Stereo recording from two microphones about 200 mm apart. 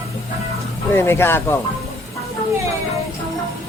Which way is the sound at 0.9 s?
10° left (ahead or behind).